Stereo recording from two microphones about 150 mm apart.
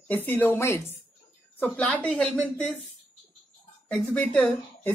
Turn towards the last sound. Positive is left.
turn(degrees=5)  # may be behind; listen again after turning